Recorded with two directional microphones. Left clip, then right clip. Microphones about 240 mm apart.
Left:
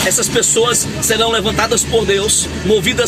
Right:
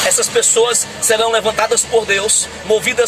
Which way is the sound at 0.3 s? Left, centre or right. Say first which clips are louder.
Even; centre.